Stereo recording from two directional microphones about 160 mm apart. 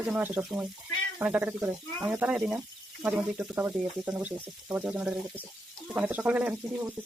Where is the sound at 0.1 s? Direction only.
10° right (ahead or behind).